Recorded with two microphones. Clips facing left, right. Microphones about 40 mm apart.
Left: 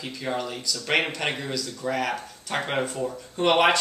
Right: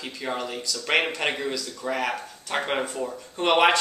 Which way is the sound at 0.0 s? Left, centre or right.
Centre.